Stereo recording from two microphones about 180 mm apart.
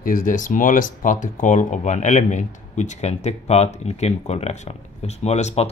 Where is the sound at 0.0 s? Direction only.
50° left (ahead or behind).